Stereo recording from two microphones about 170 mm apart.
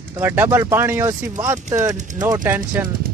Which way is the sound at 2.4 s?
10° right (ahead or behind).